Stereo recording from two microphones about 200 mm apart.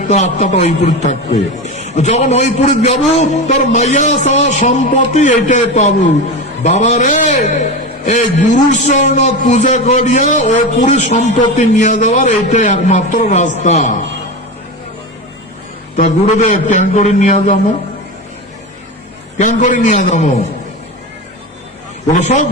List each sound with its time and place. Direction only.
0.1 s a man's voice: 35° left (ahead or behind)
16.0 s a man's voice: 35° left (ahead or behind)
19.4 s a man's voice: 40° left (ahead or behind)
22.1 s a man's voice: 35° left (ahead or behind)